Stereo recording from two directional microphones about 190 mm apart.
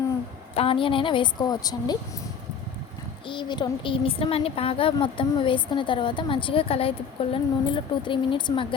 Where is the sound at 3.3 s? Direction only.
25° left (ahead or behind).